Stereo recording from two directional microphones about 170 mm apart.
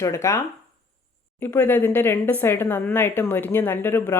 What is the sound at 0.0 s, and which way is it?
A woman's voice, 15° left (ahead or behind).